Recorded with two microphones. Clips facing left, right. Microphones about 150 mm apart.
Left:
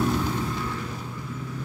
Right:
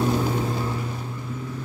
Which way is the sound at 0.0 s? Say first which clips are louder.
Right 2 dB; 20° right (ahead or behind).